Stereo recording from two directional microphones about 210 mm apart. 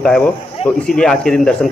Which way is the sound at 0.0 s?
5° left (ahead or behind).